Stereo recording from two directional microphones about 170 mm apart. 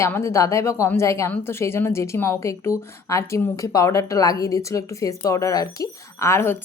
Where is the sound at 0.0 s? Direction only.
15° left (ahead or behind).